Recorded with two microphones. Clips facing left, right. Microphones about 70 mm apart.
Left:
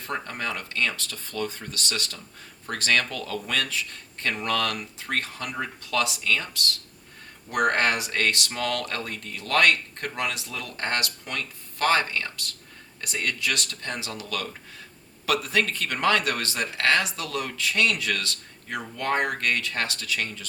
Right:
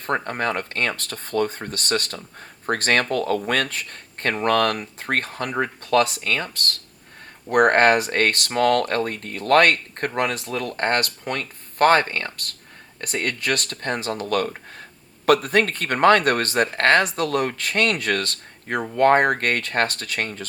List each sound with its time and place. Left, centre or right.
0.0 s speech: right